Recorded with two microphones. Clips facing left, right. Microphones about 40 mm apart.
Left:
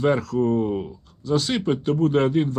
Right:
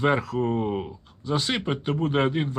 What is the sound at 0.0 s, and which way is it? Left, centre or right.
Speech, right.